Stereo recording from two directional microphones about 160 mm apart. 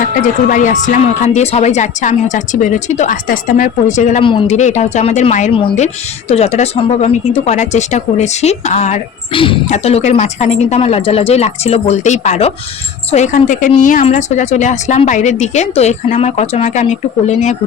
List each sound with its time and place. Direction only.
0.0 s a woman's voice: 55° left (ahead or behind)
4.2 s speech: 30° left (ahead or behind)
4.4 s a woman's voice: 45° left (ahead or behind)
9.3 s speech: 35° left (ahead or behind)
9.6 s a woman's voice: 45° left (ahead or behind)